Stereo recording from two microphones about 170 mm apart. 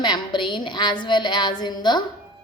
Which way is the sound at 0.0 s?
25° left (ahead or behind).